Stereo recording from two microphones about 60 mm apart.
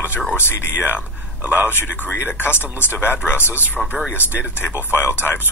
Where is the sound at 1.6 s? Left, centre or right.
Left.